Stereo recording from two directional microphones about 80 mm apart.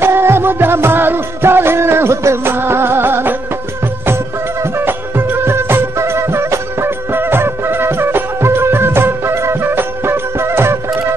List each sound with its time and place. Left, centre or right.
0.0 s music: right
4.7 s music: right